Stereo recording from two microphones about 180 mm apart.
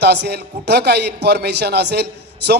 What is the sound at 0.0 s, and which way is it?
Speech, 65° right (ahead or behind).